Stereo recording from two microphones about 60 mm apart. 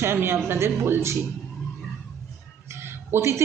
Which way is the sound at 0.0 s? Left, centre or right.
Right.